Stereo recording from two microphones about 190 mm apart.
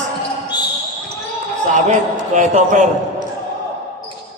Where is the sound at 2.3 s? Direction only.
40° right (ahead or behind).